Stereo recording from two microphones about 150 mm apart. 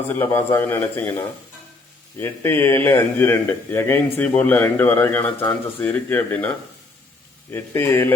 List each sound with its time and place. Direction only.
0.1 s a man's voice: 15° left (ahead or behind)
2.1 s a man's voice: 15° left (ahead or behind)
7.5 s a man's voice: 15° left (ahead or behind)